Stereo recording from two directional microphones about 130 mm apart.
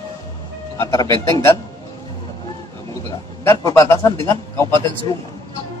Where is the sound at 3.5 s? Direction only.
20° left (ahead or behind).